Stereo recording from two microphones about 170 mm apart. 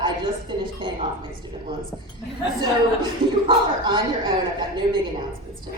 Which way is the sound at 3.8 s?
30° right (ahead or behind).